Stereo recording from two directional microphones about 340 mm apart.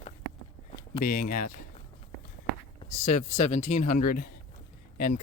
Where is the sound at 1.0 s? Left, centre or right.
Left.